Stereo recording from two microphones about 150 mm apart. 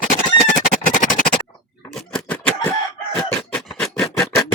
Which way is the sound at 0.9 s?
60° left (ahead or behind).